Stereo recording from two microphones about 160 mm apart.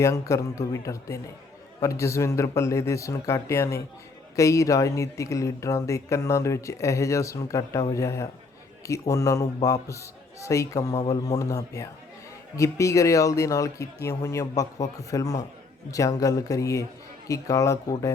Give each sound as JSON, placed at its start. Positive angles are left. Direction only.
{"t": 0.0, "sound": "speech", "side_deg": 20}